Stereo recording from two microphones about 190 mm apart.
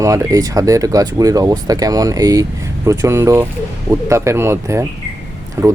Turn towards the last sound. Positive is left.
turn(degrees=-15)  # may be behind; listen again after turning